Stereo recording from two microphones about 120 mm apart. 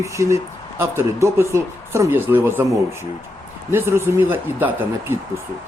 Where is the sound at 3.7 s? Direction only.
20° right (ahead or behind).